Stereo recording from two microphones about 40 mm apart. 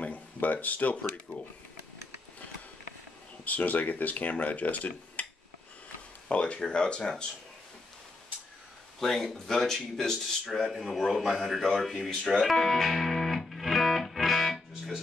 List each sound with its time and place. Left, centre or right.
0.0 s a sound: left
3.4 s speech: left
6.2 s speech: left
9.0 s speech: centre
12.2 s music: centre